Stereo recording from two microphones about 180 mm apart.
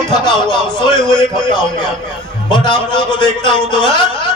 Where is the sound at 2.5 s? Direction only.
25° left (ahead or behind).